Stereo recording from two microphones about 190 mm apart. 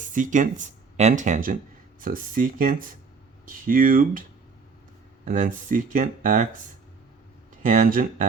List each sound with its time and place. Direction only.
0.0 s speech: 45° right (ahead or behind)
5.2 s speech: 45° right (ahead or behind)
7.6 s speech: 45° right (ahead or behind)